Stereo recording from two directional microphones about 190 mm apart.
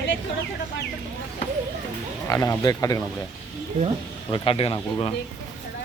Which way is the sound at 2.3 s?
15° left (ahead or behind).